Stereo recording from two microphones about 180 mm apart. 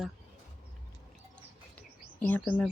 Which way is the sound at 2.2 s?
10° left (ahead or behind).